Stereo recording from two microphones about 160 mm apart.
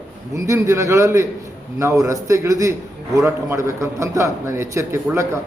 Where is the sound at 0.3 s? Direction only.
20° right (ahead or behind).